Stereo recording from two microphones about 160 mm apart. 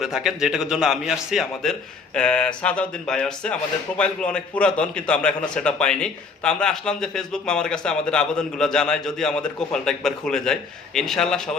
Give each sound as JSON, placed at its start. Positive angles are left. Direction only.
{"t": 0.0, "sound": "speech", "side_deg": 0}